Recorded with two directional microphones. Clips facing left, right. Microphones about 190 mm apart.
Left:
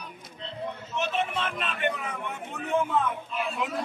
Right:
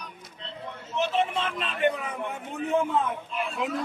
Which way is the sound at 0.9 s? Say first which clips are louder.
Right 4 dB; 30° right (ahead or behind).